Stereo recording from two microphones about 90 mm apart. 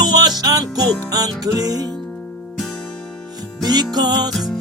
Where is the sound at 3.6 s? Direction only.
50° right (ahead or behind).